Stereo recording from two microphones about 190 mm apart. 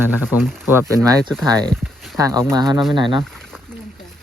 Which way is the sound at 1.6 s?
5° left (ahead or behind).